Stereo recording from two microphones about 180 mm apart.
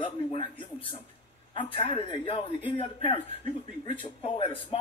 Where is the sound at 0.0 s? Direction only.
30° left (ahead or behind).